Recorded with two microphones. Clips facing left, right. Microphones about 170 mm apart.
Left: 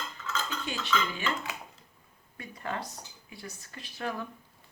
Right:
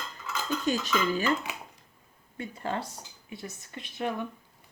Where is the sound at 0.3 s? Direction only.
15° right (ahead or behind).